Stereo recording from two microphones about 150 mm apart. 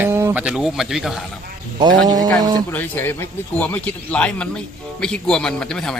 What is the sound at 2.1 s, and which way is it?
Speech, 25° right (ahead or behind).